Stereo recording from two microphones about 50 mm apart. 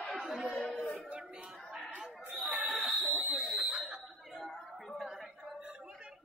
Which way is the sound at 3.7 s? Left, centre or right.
Centre.